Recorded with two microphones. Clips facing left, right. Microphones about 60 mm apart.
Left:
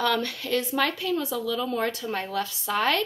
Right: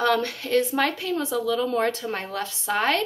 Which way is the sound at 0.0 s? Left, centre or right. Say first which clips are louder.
Right 3 dB; right.